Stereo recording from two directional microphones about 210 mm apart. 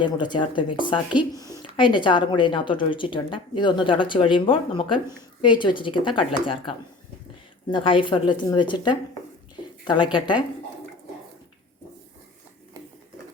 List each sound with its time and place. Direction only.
0.0 s a woman's voice: 20° left (ahead or behind)